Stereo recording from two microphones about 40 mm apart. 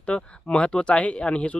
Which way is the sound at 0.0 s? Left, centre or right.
Left.